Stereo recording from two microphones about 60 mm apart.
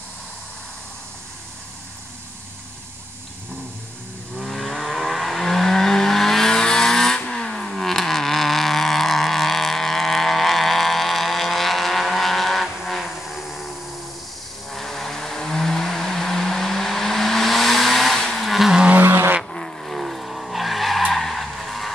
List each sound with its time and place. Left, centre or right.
4.4 s vehicle: centre
14.7 s vehicle: centre
19.0 s vehicle: right
19.5 s skidding: centre